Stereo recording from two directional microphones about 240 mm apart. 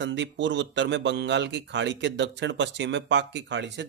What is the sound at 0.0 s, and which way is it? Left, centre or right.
Speech, right.